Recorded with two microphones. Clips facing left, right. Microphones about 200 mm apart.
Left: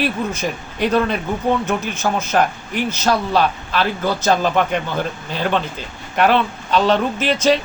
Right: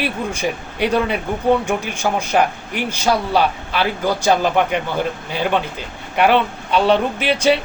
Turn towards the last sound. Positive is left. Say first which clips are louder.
# even
turn(degrees=-10)  # may be behind; listen again after turning